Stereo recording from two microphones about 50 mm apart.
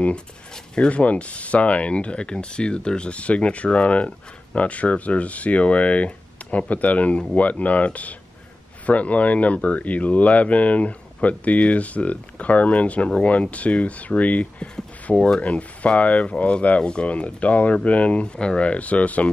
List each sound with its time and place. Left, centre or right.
0.7 s speech: left